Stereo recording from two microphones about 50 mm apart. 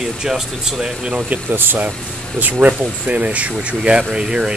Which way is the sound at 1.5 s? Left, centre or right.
Right.